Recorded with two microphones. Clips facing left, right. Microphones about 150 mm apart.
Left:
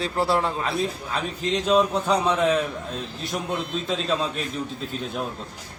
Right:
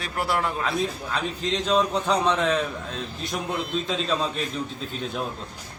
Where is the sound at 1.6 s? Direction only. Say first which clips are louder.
Left 2 dB; 5° left (ahead or behind).